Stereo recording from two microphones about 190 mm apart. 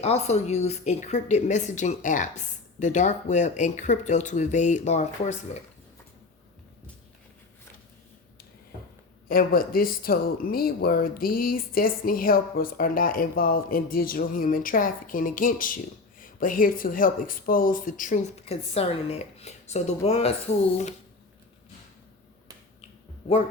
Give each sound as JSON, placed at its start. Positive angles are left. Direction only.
{"t": 0.0, "sound": "speech", "side_deg": 35}
{"t": 9.3, "sound": "speech", "side_deg": 50}